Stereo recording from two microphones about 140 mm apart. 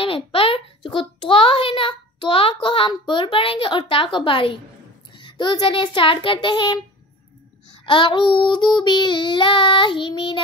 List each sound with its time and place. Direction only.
0.0 s a child's voice: 40° left (ahead or behind)
7.8 s a child's voice: 35° left (ahead or behind)